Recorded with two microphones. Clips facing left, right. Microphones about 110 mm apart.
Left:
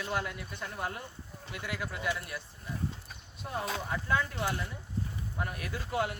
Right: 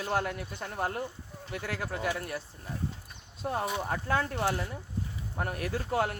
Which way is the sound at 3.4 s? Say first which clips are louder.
Right 4 dB; 40° right (ahead or behind).